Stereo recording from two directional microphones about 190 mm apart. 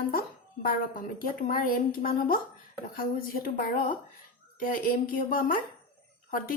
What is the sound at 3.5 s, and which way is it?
Speech, 50° left (ahead or behind).